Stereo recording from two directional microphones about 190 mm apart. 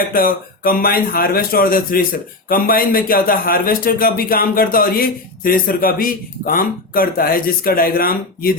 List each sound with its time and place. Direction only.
0.1 s a man's voice: 50° left (ahead or behind)